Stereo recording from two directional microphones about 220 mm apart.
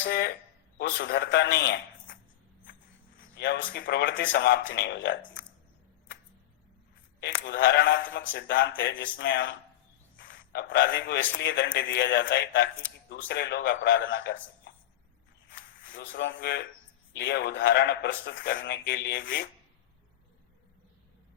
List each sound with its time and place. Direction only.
0.0 s a man's voice: 50° left (ahead or behind)
3.3 s a man's voice: 50° left (ahead or behind)
7.2 s a man's voice: 50° left (ahead or behind)
15.5 s a man's voice: 45° left (ahead or behind)